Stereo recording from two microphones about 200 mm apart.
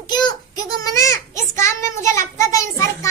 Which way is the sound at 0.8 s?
15° left (ahead or behind).